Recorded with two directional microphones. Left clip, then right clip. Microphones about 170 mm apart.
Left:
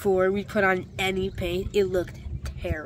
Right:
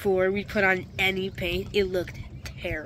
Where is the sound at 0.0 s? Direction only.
10° left (ahead or behind).